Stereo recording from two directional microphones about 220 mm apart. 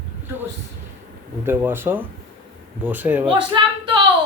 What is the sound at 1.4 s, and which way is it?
A man's voice, 10° right (ahead or behind).